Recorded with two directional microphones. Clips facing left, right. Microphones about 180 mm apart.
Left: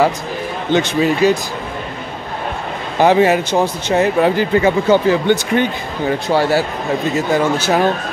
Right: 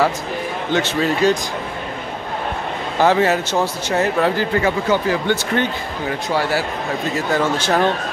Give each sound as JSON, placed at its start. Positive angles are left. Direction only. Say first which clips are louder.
{"t": 0.7, "sound": "speech", "louder": "left 4 dB", "side_deg": 15}
{"t": 3.0, "sound": "speech", "louder": "left 4 dB", "side_deg": 15}
{"t": 6.2, "sound": "speech", "louder": "left 5 dB", "side_deg": 30}
{"t": 7.2, "sound": "speech", "louder": "left 2 dB", "side_deg": 10}